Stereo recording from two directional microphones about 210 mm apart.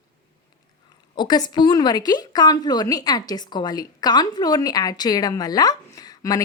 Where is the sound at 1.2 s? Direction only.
20° left (ahead or behind).